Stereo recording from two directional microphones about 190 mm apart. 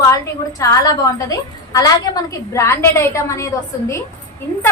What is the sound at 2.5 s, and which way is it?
A woman's voice, 15° left (ahead or behind).